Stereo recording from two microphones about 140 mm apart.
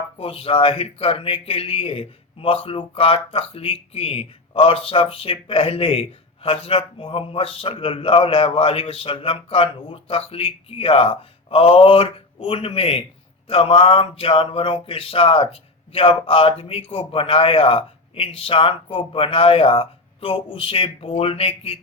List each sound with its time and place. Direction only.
0.2 s speech: 40° left (ahead or behind)